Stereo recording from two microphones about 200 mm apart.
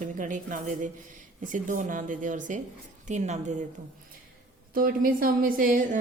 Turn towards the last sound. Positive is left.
turn(degrees=-45)  # may be behind; listen again after turning